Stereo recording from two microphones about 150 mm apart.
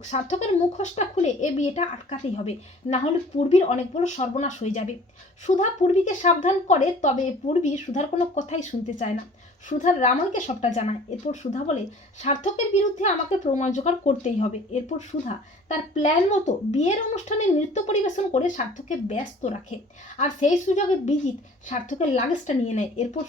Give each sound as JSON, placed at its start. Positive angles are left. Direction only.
{"t": 0.1, "sound": "speech", "side_deg": 45}
{"t": 2.0, "sound": "speech", "side_deg": 40}